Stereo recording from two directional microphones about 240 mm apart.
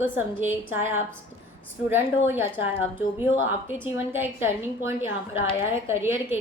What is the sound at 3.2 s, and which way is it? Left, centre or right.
A woman's voice, centre.